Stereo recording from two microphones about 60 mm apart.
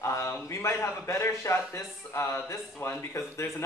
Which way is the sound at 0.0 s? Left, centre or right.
Left.